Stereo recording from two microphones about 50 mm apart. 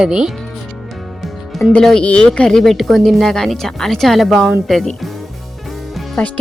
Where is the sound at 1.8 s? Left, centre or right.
Centre.